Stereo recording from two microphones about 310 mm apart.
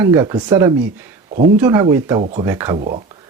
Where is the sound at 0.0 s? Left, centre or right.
Centre.